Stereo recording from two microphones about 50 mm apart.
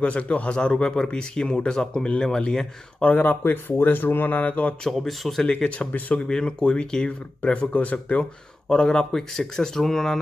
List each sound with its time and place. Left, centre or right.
0.0 s speech: left; by 2.7 s centre
3.0 s speech: left
3.3 s speech: left
4.9 s speech: centre
5.5 s speech: left
5.9 s speech: left
6.1 s speech: centre
8.6 s speech: centre